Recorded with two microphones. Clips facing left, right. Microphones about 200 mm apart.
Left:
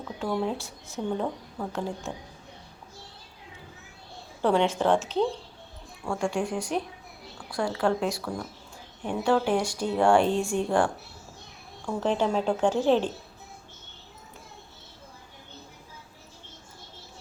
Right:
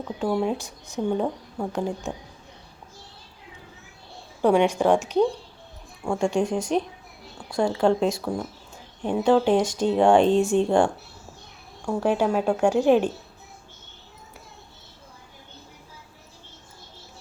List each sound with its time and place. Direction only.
0.2 s speech: 15° right (ahead or behind)
4.4 s speech: 15° right (ahead or behind)
11.9 s speech: 10° right (ahead or behind)